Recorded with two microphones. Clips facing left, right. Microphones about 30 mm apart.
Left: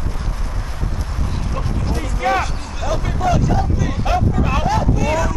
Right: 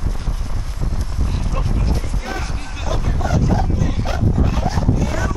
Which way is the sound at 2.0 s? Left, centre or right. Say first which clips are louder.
Left 9 dB; left.